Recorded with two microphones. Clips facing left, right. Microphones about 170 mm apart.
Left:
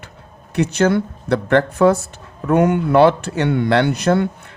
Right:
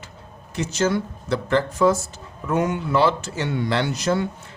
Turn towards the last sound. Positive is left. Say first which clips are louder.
# left 6 dB
turn(degrees=60)  # may be behind; listen again after turning